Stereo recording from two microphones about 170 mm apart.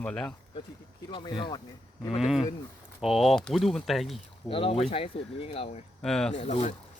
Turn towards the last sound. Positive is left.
turn(degrees=40)  # may be behind; listen again after turning